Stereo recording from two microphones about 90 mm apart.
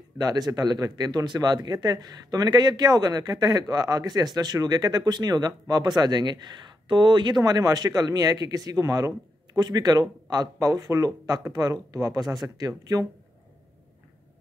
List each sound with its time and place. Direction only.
0.2 s speech: 45° right (ahead or behind)
6.9 s speech: 60° right (ahead or behind); by 13.0 s 45° right (ahead or behind)